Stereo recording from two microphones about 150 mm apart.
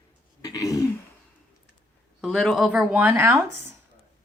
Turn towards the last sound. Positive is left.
turn(degrees=-20)  # may be behind; listen again after turning